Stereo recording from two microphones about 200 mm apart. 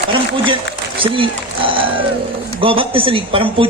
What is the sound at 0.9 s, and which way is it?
Speech, 25° right (ahead or behind).